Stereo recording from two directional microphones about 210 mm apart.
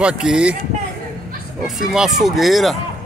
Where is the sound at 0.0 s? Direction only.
5° right (ahead or behind).